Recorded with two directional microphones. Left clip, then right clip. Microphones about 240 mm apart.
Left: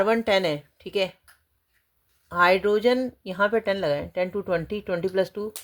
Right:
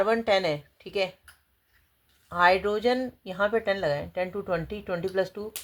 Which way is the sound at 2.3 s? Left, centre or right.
Left.